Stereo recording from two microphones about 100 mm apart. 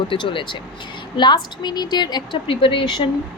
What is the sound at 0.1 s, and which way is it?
A woman's voice, 55° left (ahead or behind).